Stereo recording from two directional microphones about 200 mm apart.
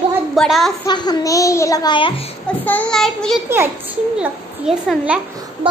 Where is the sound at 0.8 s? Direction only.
20° left (ahead or behind).